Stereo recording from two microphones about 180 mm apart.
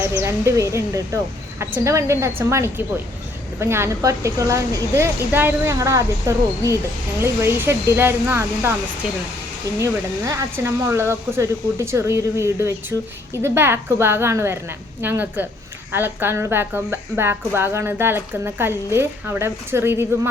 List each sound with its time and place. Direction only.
0.1 s a woman's voice: 15° right (ahead or behind)
9.7 s a woman's voice: 15° right (ahead or behind)